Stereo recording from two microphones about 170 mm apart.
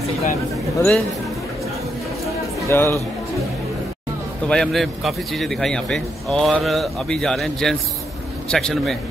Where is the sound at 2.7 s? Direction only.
15° left (ahead or behind).